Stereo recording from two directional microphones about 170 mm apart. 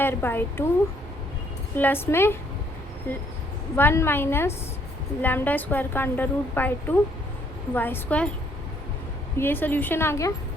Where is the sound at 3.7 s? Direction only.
15° left (ahead or behind).